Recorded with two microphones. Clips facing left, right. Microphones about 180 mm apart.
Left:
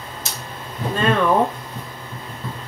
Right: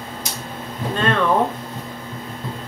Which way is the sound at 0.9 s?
5° left (ahead or behind).